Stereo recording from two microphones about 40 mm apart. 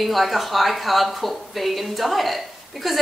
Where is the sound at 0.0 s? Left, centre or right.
Centre.